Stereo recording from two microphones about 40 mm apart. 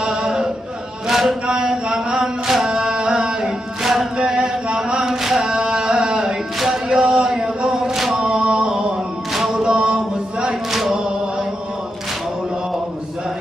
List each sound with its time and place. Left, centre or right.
0.0 s chant: centre
1.5 s carnatic music: centre
3.8 s chant: centre
4.2 s a sound: right
5.0 s chant: centre
6.6 s music: centre
7.0 s a sound: centre
8.1 s mantra: centre
9.3 s a capella: centre
9.6 s a sound: right
10.7 s chant: centre